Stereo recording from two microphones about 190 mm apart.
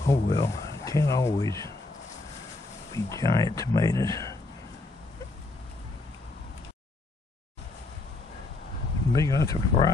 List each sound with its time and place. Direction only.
0.1 s speech: 20° left (ahead or behind)
2.9 s speech: 15° left (ahead or behind)
9.1 s speech: 15° left (ahead or behind)